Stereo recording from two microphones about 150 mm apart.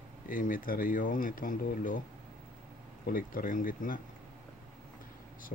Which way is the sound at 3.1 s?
70° left (ahead or behind).